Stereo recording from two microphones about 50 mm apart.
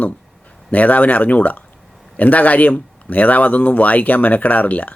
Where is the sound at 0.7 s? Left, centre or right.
Left.